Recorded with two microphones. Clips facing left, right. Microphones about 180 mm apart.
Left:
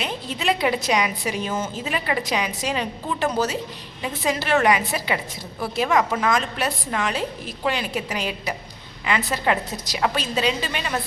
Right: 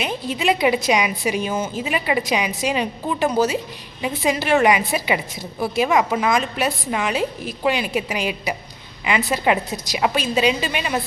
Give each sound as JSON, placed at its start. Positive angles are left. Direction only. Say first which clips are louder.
{"t": 0.0, "sound": "a woman's voice", "louder": "right 4 dB", "side_deg": -10}